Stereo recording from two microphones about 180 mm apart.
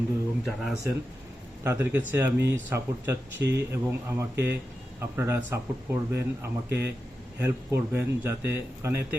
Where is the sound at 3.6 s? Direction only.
15° right (ahead or behind).